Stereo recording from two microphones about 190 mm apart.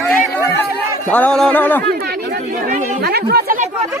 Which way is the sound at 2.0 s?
50° right (ahead or behind).